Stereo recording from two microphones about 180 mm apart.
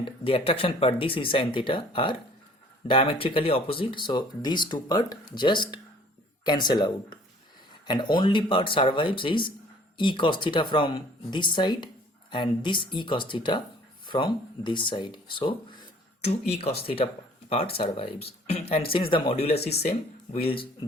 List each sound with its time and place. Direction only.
0.0 s speech: 30° left (ahead or behind)